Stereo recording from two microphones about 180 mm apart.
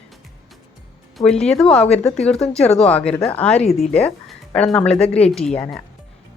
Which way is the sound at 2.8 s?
5° left (ahead or behind).